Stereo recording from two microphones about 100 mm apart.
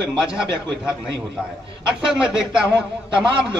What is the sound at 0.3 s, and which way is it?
Speech, 10° right (ahead or behind).